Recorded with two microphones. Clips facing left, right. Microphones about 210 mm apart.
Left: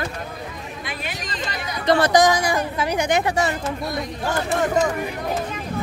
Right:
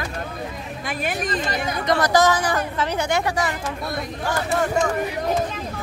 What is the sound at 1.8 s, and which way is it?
Speech, 30° left (ahead or behind).